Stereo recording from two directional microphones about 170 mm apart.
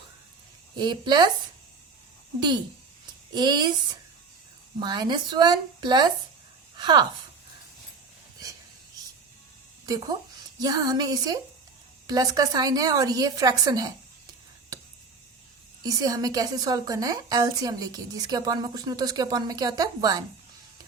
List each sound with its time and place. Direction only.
0.8 s a woman's voice: 25° right (ahead or behind)
3.3 s a woman's voice: 25° right (ahead or behind)
4.8 s a woman's voice: 25° right (ahead or behind)
6.7 s a sound: 25° right (ahead or behind)
9.8 s a woman's voice: 20° right (ahead or behind)
15.8 s a woman's voice: 20° right (ahead or behind)